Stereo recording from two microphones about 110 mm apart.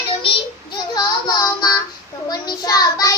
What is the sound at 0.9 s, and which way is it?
Child singing, 35° left (ahead or behind).